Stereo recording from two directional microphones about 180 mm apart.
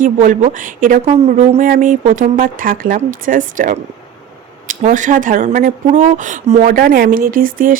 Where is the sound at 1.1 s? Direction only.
35° right (ahead or behind).